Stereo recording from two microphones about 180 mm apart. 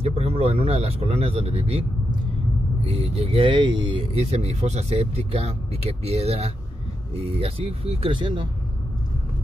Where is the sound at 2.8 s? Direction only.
35° right (ahead or behind).